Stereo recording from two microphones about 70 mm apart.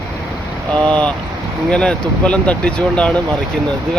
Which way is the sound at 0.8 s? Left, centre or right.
Centre.